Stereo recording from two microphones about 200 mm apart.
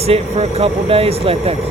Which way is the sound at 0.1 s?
30° right (ahead or behind).